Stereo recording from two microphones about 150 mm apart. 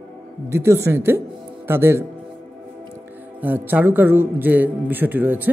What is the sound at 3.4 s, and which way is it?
Speech, 10° right (ahead or behind).